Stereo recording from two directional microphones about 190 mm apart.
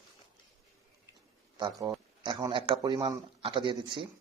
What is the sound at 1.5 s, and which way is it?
Speech, 20° right (ahead or behind).